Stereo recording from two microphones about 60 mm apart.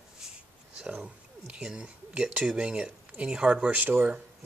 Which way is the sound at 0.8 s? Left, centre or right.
Centre.